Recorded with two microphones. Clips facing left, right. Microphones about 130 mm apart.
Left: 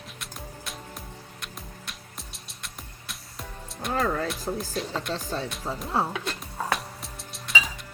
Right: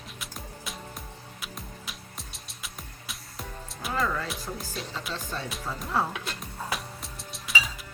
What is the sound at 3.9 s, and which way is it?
Music, 45° left (ahead or behind).